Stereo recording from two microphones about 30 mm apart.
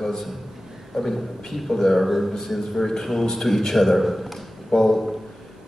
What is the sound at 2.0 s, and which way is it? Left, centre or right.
Speech, centre.